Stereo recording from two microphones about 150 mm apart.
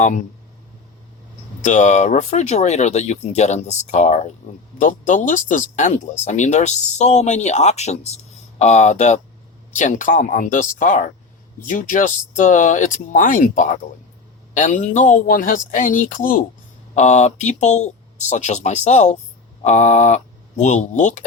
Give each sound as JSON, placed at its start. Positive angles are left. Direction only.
{"t": 1.6, "sound": "speech", "side_deg": 55}
{"t": 16.9, "sound": "speech", "side_deg": 50}